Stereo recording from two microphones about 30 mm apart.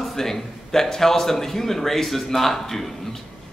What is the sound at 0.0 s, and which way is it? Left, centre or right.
Speech, centre.